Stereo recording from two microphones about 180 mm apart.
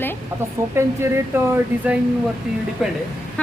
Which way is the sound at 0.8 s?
15° right (ahead or behind).